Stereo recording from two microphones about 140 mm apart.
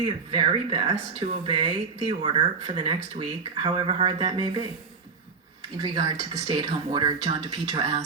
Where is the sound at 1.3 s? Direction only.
50° right (ahead or behind).